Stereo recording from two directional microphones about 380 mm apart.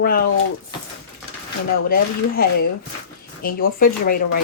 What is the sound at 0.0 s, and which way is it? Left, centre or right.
Speech, left.